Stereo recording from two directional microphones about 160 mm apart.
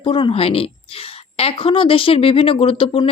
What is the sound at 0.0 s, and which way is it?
A woman's voice, 30° left (ahead or behind).